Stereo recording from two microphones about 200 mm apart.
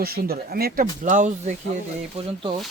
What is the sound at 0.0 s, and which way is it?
Speech, 50° right (ahead or behind).